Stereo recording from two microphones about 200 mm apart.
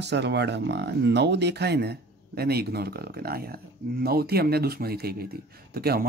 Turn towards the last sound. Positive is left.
turn(degrees=-50)  # may be behind; listen again after turning